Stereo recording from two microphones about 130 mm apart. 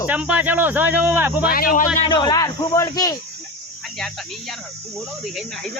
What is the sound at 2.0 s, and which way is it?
A man's voice, 30° left (ahead or behind).